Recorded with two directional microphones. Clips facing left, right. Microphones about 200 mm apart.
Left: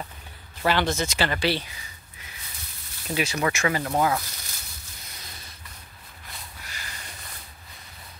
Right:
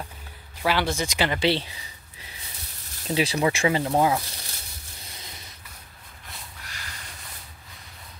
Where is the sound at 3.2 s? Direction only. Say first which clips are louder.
Right 3 dB; 30° right (ahead or behind).